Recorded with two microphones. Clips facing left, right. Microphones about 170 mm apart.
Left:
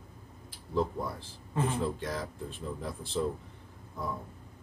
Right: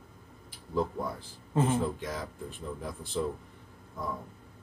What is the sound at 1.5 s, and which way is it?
Speech, 25° right (ahead or behind).